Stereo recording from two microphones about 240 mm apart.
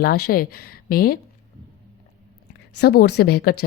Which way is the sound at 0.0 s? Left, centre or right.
Left.